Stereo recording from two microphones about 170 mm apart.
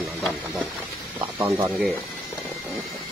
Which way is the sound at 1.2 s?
20° right (ahead or behind).